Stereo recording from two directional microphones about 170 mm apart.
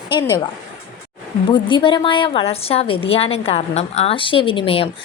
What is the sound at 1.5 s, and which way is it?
A woman's voice, 30° left (ahead or behind).